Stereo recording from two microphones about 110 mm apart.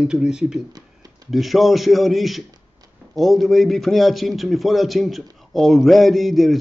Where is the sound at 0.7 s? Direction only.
35° right (ahead or behind).